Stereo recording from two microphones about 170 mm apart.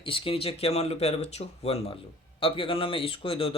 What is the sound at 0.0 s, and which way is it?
Speech, 30° left (ahead or behind).